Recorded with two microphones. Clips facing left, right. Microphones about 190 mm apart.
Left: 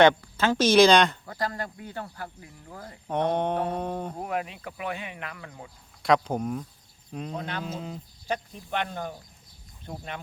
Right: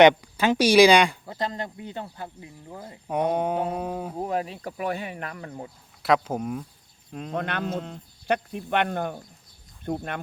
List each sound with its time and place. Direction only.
0.2 s speech: 15° right (ahead or behind)
1.3 s speech: 20° right (ahead or behind); by 4.2 s 5° right (ahead or behind)
4.2 s speech: 30° right (ahead or behind)
6.0 s speech: 5° right (ahead or behind)
7.3 s speech: 65° right (ahead or behind)
7.8 s speech: 5° left (ahead or behind)
8.3 s speech: 65° right (ahead or behind)